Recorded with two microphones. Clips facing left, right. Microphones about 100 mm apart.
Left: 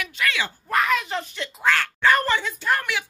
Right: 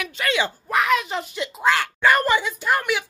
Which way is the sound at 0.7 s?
5° right (ahead or behind).